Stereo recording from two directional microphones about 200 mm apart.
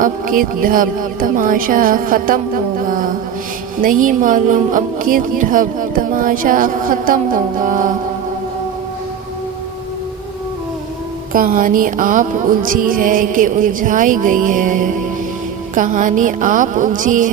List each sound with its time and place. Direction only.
0.0 s speech: 45° right (ahead or behind)
11.3 s a woman's voice: 45° right (ahead or behind)